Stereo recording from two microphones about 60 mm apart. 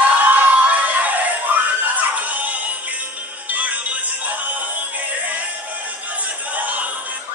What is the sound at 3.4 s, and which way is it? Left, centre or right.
Music, right.